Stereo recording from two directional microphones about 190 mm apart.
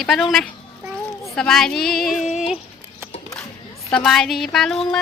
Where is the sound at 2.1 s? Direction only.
35° left (ahead or behind).